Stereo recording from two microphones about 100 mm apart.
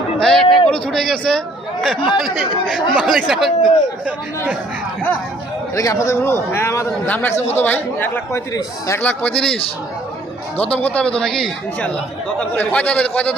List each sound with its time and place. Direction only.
0.2 s a man's voice: 5° left (ahead or behind)
5.7 s a man's voice: 35° left (ahead or behind); by 9.6 s 10° left (ahead or behind)
10.8 s speech: 10° left (ahead or behind)
12.4 s speech: 15° left (ahead or behind)